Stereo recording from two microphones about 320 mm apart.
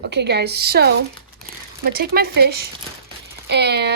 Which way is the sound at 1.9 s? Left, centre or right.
Right.